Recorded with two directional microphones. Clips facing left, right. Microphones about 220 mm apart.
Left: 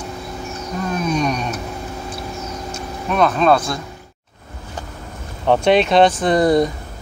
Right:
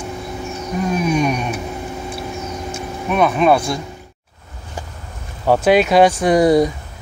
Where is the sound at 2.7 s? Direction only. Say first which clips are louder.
Right 2 dB; 10° right (ahead or behind).